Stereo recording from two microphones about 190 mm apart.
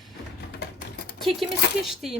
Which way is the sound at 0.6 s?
60° left (ahead or behind).